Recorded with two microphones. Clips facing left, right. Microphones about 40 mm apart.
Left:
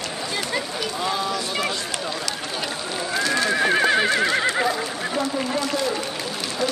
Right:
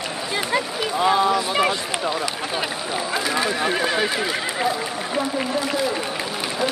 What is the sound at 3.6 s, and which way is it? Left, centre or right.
Neigh, centre.